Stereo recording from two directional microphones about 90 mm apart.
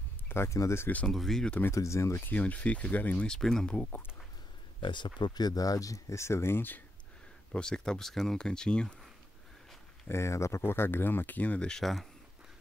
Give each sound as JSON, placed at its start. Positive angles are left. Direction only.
{"t": 0.3, "sound": "speech", "side_deg": 30}
{"t": 1.0, "sound": "speech", "side_deg": 5}
{"t": 1.7, "sound": "speech", "side_deg": 35}
{"t": 3.3, "sound": "speech", "side_deg": 5}
{"t": 4.7, "sound": "speech", "side_deg": 55}
{"t": 7.5, "sound": "speech", "side_deg": 10}
{"t": 10.0, "sound": "speech", "side_deg": 30}